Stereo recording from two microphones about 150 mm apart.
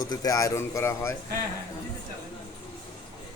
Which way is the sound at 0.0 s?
25° left (ahead or behind).